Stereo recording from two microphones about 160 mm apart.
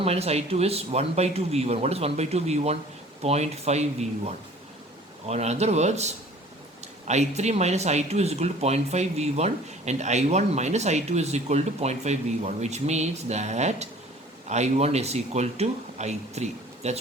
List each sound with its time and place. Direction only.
0.0 s a man's voice: 40° right (ahead or behind)
5.3 s speech: 45° right (ahead or behind)